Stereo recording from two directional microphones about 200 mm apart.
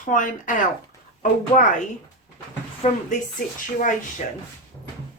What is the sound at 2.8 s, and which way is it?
Speech, 35° left (ahead or behind).